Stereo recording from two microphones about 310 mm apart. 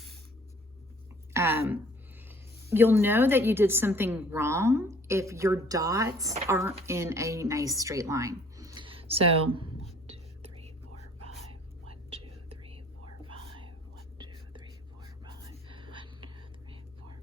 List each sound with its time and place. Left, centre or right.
1.3 s a sound: centre
2.6 s a woman's voice: centre
10.1 s whispering: centre
11.9 s whispering: centre
15.7 s whispering: centre